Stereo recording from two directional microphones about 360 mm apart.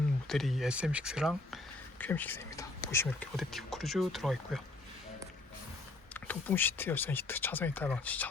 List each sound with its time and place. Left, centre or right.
0.3 s speech: centre
6.1 s speech: centre